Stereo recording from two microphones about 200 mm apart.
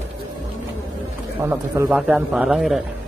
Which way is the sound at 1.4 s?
10° right (ahead or behind).